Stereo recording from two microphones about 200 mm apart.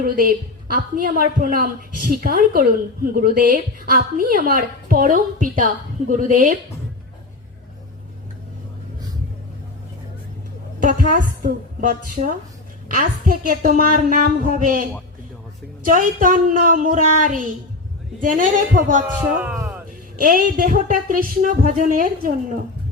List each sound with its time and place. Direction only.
0.0 s a woman's voice: 45° right (ahead or behind)
10.8 s a woman's voice: 45° right (ahead or behind)
19.4 s speech: 5° right (ahead or behind)
20.1 s a woman's voice: 45° right (ahead or behind)